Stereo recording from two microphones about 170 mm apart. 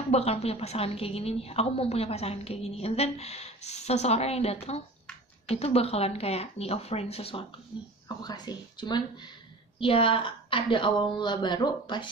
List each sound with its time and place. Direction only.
0.1 s a woman's voice: 35° left (ahead or behind)
8.2 s a woman's voice: 25° left (ahead or behind)